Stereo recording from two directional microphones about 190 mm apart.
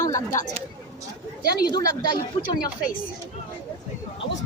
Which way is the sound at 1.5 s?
50° left (ahead or behind).